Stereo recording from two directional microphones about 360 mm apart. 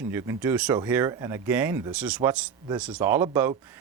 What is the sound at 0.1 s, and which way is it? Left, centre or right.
Speech, centre.